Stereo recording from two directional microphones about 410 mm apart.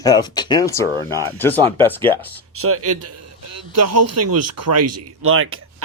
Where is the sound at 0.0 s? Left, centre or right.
Centre.